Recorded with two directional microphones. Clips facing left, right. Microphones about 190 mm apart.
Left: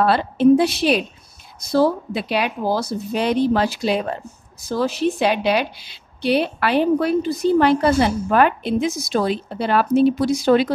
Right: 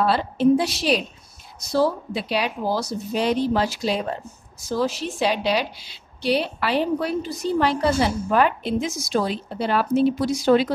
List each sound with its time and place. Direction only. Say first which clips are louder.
0.0 s a woman's voice: left 4 dB; 60° left (ahead or behind)